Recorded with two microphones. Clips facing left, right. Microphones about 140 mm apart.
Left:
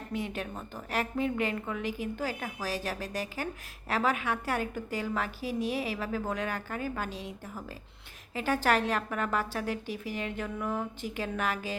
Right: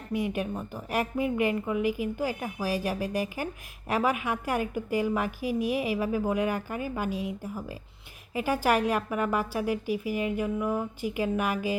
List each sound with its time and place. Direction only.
0.1 s a woman's voice: 10° right (ahead or behind)